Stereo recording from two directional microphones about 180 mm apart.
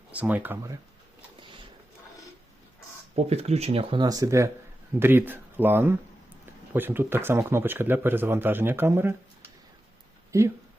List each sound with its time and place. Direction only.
0.1 s speech: 10° right (ahead or behind)
3.2 s speech: 35° right (ahead or behind); by 10.5 s 15° right (ahead or behind)